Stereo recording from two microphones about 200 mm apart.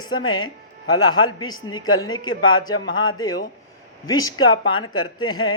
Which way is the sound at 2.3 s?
90° left.